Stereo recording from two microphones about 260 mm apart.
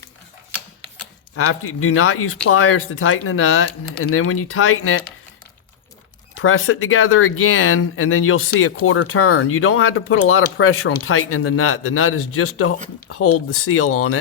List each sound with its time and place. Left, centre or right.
1.4 s speech: left
6.3 s speech: left